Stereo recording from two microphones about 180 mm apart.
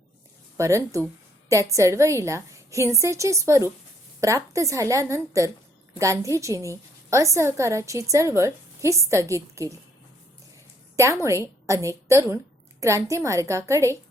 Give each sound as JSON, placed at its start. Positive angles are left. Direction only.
{"t": 0.5, "sound": "a woman's voice", "side_deg": -15}
{"t": 10.9, "sound": "a woman's voice", "side_deg": -15}